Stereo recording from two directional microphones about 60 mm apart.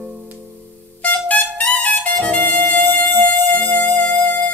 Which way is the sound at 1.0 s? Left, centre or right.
Left.